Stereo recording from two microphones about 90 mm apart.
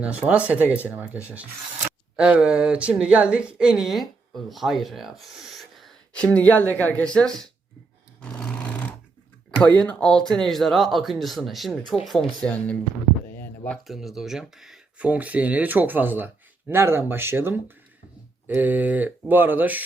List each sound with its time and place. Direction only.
0.0 s speech: 15° right (ahead or behind)
5.2 s a sound: centre (ahead or behind)
6.1 s speech: 15° left (ahead or behind)
8.2 s sewing machine: 10° left (ahead or behind)
9.8 s speech: 10° left (ahead or behind)
13.8 s speech: centre (ahead or behind)
14.9 s speech: 15° right (ahead or behind)